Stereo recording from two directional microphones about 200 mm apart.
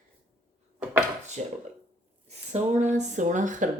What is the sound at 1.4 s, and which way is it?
Speech, 35° right (ahead or behind).